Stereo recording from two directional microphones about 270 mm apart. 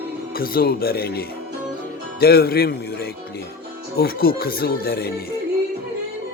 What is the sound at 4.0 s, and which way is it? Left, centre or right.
Speech, left.